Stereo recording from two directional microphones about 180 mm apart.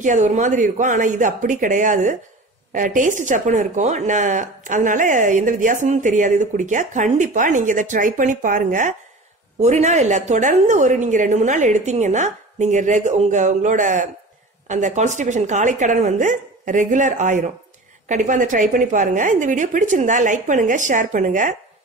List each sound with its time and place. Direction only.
0.0 s speech: 45° right (ahead or behind)